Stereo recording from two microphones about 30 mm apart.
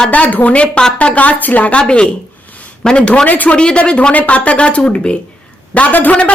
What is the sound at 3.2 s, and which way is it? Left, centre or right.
Speech, left.